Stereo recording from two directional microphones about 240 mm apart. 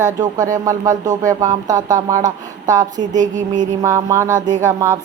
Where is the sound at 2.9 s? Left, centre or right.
Right.